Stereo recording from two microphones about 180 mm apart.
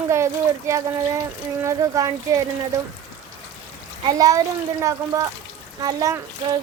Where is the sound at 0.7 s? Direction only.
15° right (ahead or behind).